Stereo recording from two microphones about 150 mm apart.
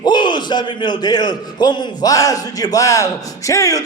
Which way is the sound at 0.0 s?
30° left (ahead or behind).